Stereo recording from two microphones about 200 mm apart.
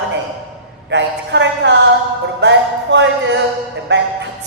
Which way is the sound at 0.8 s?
65° right (ahead or behind).